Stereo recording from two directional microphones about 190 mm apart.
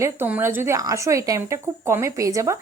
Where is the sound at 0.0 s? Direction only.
10° right (ahead or behind).